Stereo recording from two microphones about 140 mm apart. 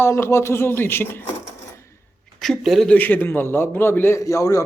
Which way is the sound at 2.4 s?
Centre (ahead or behind).